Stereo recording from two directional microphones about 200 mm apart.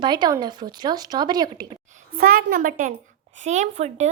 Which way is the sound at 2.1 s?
50° right (ahead or behind).